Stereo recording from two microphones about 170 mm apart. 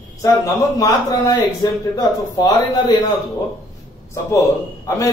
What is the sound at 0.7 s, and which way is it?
Speech, 20° left (ahead or behind).